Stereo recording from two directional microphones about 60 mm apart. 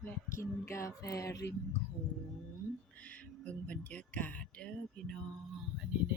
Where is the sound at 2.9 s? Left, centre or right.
Left.